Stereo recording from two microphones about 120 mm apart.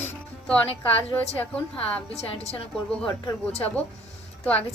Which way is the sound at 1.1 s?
10° left (ahead or behind).